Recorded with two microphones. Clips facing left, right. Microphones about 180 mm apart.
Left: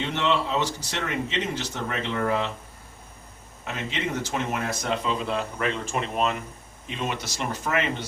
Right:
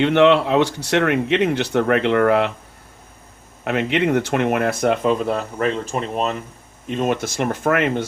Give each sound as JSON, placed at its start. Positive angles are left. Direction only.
{"t": 0.0, "sound": "speech", "side_deg": -65}
{"t": 3.6, "sound": "speech", "side_deg": -65}